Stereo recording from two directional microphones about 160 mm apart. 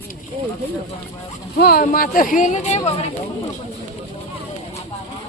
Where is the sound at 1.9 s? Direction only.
60° left (ahead or behind); by 3.1 s 40° left (ahead or behind).